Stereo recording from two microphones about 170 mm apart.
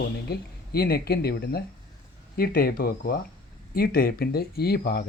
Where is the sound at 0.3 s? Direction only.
65° left (ahead or behind).